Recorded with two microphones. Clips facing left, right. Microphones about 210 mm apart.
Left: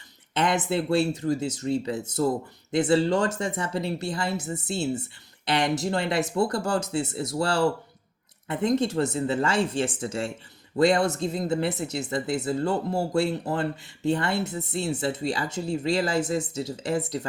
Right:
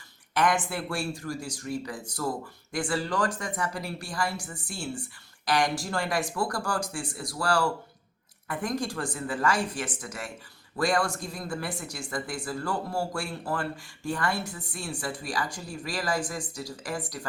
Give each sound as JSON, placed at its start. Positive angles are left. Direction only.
{"t": 0.3, "sound": "speech", "side_deg": 20}